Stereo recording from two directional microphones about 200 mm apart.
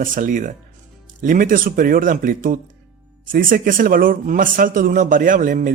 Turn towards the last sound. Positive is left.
turn(degrees=-40)  # may be behind; listen again after turning